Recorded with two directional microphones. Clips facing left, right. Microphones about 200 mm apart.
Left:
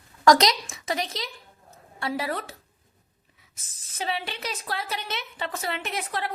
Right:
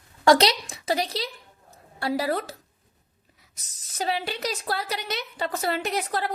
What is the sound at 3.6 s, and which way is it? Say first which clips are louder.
A woman's voice: right 3 dB; 40° right (ahead or behind).